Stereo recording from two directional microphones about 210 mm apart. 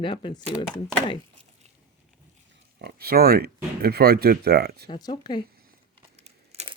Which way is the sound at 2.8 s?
45° right (ahead or behind).